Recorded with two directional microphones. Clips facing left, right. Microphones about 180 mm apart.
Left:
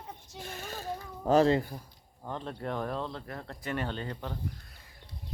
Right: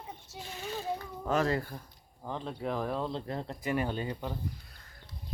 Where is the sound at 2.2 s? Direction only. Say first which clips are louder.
Right 1 dB; centre (ahead or behind).